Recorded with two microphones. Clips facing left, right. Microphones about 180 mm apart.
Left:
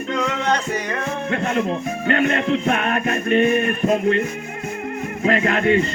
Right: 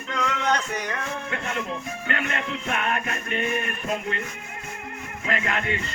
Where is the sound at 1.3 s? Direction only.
35° left (ahead or behind).